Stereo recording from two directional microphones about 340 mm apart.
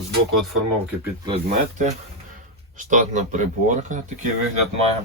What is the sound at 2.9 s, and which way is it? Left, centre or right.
Speech, right.